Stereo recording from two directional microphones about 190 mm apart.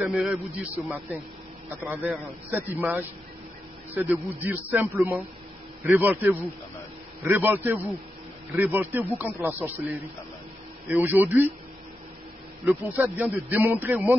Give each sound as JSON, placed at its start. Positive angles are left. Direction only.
{"t": 0.0, "sound": "speech", "side_deg": 0}
{"t": 7.2, "sound": "speech", "side_deg": -10}
{"t": 10.9, "sound": "speech", "side_deg": -10}
{"t": 12.6, "sound": "speech", "side_deg": -5}